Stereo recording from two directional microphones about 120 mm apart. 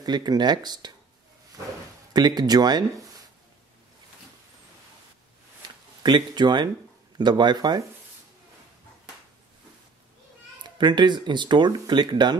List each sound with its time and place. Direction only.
0.0 s speech: 35° right (ahead or behind)
2.1 s speech: 35° right (ahead or behind)
6.0 s speech: 40° right (ahead or behind)
10.6 s speech: 40° right (ahead or behind)